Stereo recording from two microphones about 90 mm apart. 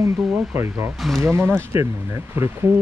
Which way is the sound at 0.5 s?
30° right (ahead or behind).